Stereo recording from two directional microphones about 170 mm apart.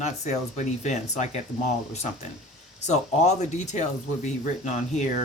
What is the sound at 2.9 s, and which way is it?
Speech, 40° left (ahead or behind).